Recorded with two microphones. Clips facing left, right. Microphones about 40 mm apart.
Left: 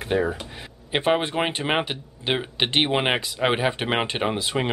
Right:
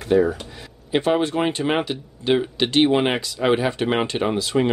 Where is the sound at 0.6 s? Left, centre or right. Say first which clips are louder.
Right 4 dB; left.